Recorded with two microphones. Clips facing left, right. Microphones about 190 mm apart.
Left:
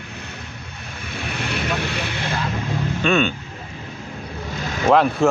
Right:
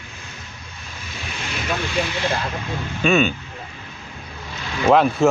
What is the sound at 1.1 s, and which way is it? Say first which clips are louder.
Vehicle: left 4 dB; 60° left (ahead or behind).